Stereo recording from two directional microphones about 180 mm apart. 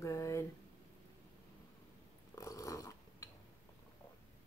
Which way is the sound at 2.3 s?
15° left (ahead or behind).